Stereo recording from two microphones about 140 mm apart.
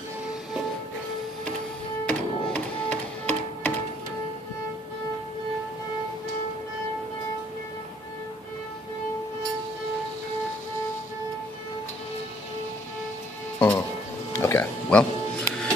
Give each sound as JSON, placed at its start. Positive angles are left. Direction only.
{"t": 2.0, "sound": "music", "side_deg": 10}
{"t": 13.6, "sound": "music", "side_deg": 15}